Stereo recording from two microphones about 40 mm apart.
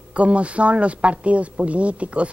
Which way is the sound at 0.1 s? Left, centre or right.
Right.